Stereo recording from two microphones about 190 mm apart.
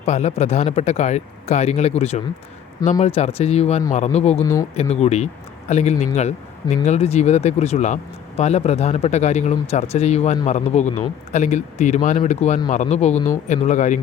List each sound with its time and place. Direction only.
0.0 s speech: 35° left (ahead or behind)